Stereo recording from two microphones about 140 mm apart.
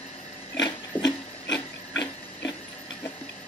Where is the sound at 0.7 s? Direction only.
30° left (ahead or behind).